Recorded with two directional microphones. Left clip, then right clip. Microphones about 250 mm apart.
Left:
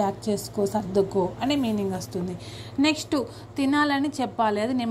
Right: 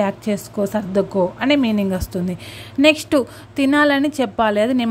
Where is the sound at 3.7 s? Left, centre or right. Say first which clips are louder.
Right 8 dB; right.